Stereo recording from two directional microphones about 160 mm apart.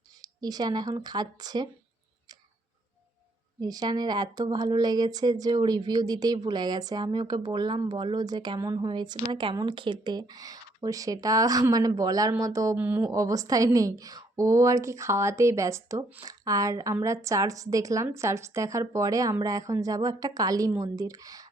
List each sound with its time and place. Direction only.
0.2 s a woman's voice: 25° right (ahead or behind)
3.6 s a woman's voice: 25° right (ahead or behind)